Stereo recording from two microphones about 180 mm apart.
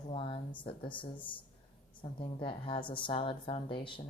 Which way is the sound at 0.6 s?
25° left (ahead or behind).